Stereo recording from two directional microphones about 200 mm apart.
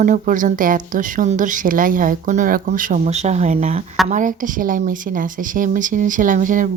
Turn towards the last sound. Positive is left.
turn(degrees=-40)  # may be behind; listen again after turning